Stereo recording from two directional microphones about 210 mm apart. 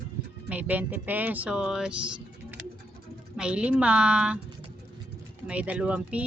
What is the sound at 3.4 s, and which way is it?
A woman's voice, 5° right (ahead or behind).